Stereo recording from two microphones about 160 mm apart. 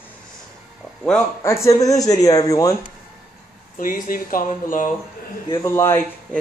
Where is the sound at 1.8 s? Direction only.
20° left (ahead or behind).